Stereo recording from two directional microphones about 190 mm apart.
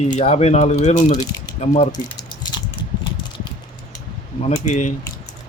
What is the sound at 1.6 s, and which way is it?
Speech, 35° left (ahead or behind).